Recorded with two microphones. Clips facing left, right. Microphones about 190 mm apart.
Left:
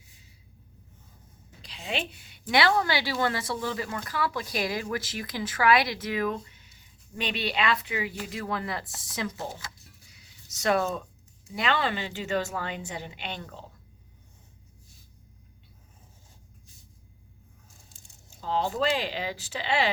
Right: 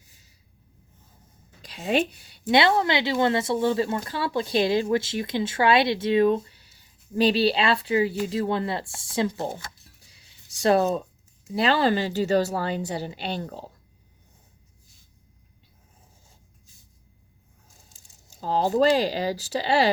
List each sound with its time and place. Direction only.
1.6 s a woman's voice: 45° right (ahead or behind); by 9.5 s 30° right (ahead or behind)
9.5 s speech: 50° right (ahead or behind)
10.6 s speech: 30° right (ahead or behind)
18.3 s speech: 40° right (ahead or behind)